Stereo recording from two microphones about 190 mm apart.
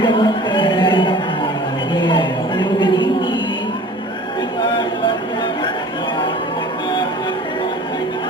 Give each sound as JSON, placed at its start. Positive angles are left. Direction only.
{"t": 0.0, "sound": "music", "side_deg": 25}